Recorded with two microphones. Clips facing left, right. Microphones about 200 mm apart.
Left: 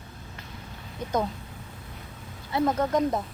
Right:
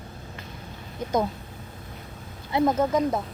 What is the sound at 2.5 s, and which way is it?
Speech, 20° right (ahead or behind).